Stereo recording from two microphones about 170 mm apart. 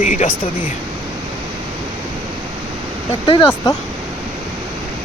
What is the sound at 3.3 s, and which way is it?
Speech, 30° left (ahead or behind).